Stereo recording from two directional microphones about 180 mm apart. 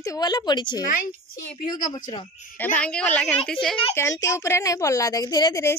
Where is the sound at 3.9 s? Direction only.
15° left (ahead or behind).